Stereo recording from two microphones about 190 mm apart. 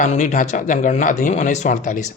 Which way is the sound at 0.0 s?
40° left (ahead or behind).